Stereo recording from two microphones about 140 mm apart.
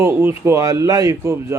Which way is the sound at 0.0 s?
15° right (ahead or behind).